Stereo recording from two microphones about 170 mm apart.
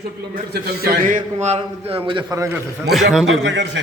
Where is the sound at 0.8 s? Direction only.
50° right (ahead or behind); by 2.3 s 30° right (ahead or behind).